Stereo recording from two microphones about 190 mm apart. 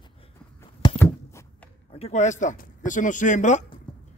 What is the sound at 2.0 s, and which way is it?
A man's voice, 40° left (ahead or behind).